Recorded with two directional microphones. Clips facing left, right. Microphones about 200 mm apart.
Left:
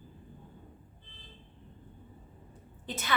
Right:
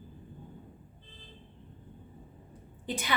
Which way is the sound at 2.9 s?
15° right (ahead or behind).